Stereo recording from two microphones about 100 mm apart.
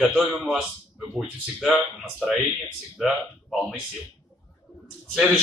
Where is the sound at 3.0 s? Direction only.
5° right (ahead or behind).